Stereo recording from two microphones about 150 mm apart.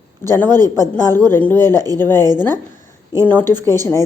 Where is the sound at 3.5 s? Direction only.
25° right (ahead or behind).